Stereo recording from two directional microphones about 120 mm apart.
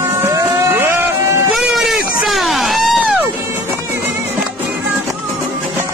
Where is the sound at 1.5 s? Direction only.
5° right (ahead or behind).